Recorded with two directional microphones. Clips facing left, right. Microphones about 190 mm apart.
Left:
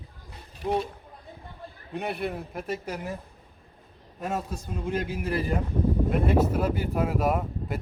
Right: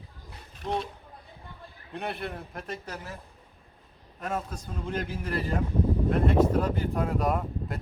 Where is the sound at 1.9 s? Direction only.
5° left (ahead or behind).